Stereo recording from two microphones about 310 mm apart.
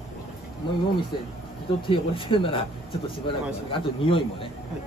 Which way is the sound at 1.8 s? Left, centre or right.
Centre.